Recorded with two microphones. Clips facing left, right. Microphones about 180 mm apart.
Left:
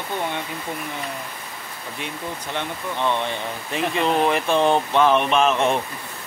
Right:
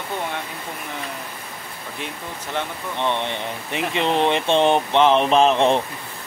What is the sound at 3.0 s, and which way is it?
Speech, 25° right (ahead or behind).